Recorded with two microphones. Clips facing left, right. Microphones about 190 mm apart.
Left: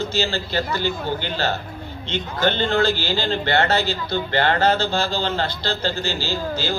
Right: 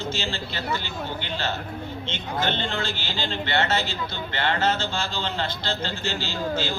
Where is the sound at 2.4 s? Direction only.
40° left (ahead or behind).